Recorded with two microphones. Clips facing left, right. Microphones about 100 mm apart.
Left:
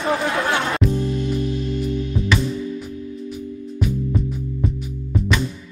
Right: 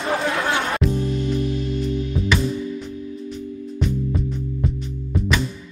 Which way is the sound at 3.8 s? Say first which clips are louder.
Left 1 dB; centre (ahead or behind).